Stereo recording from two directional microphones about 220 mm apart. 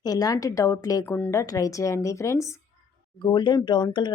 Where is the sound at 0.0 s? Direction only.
15° left (ahead or behind).